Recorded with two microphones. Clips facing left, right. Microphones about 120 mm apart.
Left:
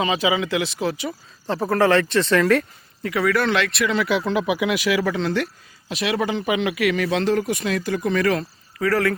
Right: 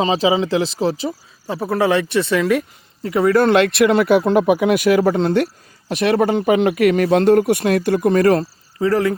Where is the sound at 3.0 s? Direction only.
25° right (ahead or behind).